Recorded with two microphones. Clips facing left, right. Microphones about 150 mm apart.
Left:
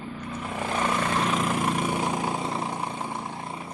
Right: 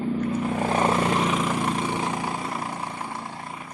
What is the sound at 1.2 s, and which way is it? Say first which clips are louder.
Vehicle: right 2 dB; 10° right (ahead or behind).